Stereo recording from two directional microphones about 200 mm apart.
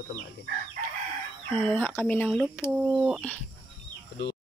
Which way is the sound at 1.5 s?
5° left (ahead or behind).